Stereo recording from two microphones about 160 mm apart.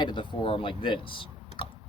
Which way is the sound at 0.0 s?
30° left (ahead or behind).